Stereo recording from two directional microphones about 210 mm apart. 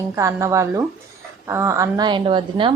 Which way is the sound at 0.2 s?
15° right (ahead or behind).